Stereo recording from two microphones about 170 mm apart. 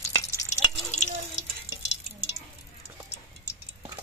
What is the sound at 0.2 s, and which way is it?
Drip, 20° left (ahead or behind).